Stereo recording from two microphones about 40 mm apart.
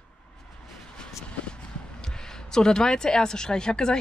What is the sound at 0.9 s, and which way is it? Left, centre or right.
Vehicle, left.